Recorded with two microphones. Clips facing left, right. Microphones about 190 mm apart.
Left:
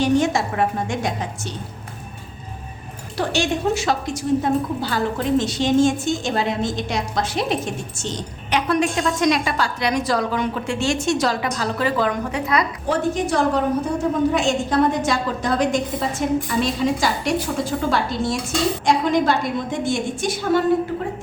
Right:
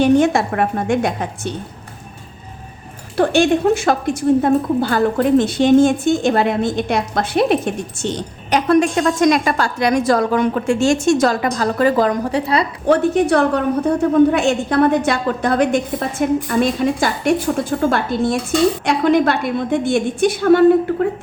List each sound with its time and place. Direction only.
0.0 s a woman's voice: 55° right (ahead or behind)
3.2 s a woman's voice: 55° right (ahead or behind)
8.4 s a woman's voice: 45° right (ahead or behind)
12.9 s a woman's voice: 60° right (ahead or behind)